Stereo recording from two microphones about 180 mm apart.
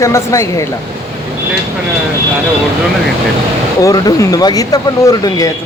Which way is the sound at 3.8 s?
20° left (ahead or behind).